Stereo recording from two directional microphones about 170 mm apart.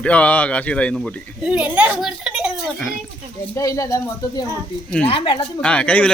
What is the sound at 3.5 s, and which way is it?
Speech, 20° left (ahead or behind).